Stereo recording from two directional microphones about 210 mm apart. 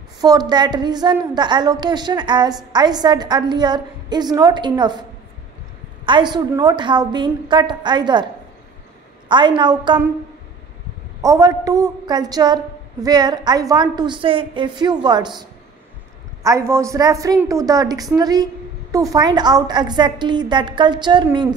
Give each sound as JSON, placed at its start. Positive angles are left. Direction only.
{"t": 0.2, "sound": "a woman's voice", "side_deg": -20}
{"t": 6.0, "sound": "a woman's voice", "side_deg": -20}
{"t": 9.3, "sound": "a woman's voice", "side_deg": -20}
{"t": 11.2, "sound": "a woman's voice", "side_deg": -15}
{"t": 16.4, "sound": "a woman's voice", "side_deg": -15}